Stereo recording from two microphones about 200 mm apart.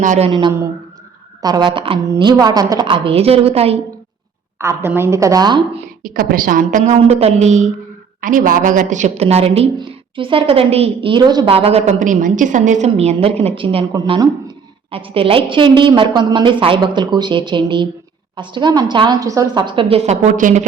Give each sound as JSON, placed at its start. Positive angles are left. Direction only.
{"t": 0.0, "sound": "a woman's voice", "side_deg": -40}
{"t": 0.3, "sound": "a woman's voice", "side_deg": -25}
{"t": 4.5, "sound": "a woman's voice", "side_deg": -15}
{"t": 6.0, "sound": "a woman's voice", "side_deg": -45}